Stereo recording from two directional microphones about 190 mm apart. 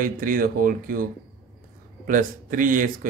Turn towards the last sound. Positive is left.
turn(degrees=-45)  # may be behind; listen again after turning